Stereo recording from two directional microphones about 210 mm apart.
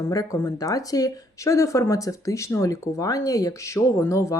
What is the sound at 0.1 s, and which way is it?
Speech, 15° left (ahead or behind).